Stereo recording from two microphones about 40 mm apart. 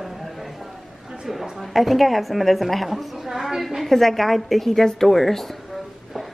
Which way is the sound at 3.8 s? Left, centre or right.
Centre.